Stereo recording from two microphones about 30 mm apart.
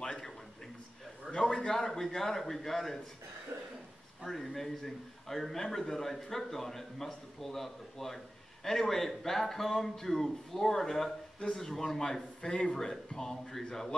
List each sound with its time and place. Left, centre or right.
0.0 s a sound: left
1.3 s a sound: left
1.7 s a man's voice: centre
4.3 s speech: centre
12.4 s speech: left
13.1 s speech: centre